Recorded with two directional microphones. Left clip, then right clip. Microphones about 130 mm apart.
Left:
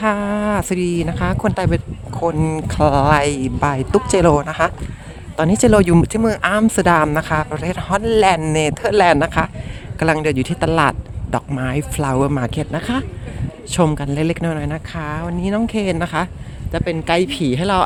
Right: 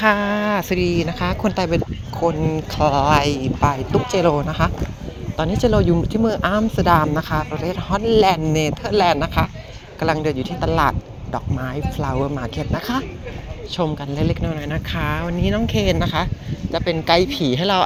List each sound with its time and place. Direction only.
0.0 s speech: 35° left (ahead or behind)
2.4 s speech: 70° left (ahead or behind)
5.4 s speech: 85° left; by 9.5 s 55° left (ahead or behind)
10.0 s speech: 65° left (ahead or behind)
13.7 s speech: 80° left
14.7 s speech: 20° left (ahead or behind)
15.4 s speech: 35° left (ahead or behind)